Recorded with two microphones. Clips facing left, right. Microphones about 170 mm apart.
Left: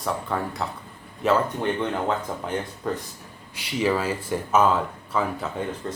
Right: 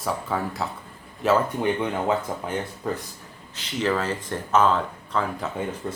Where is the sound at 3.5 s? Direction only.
10° left (ahead or behind).